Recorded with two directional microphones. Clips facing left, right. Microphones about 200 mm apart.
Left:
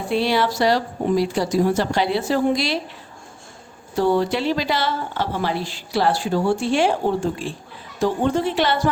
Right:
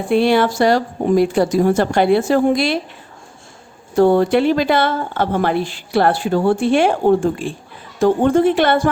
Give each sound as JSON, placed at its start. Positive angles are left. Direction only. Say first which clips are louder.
{"t": 0.1, "sound": "a woman's voice", "louder": "right 6 dB", "side_deg": -55}
{"t": 3.9, "sound": "a woman's voice", "louder": "right 7 dB", "side_deg": -55}